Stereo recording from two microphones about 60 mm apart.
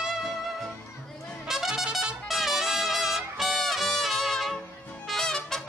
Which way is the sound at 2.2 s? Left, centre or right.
Centre.